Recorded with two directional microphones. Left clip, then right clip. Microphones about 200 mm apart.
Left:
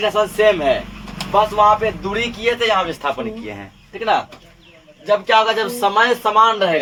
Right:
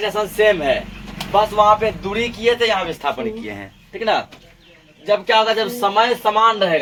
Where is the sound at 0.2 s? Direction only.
30° left (ahead or behind).